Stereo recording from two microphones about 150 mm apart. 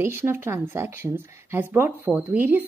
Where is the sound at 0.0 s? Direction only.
15° right (ahead or behind).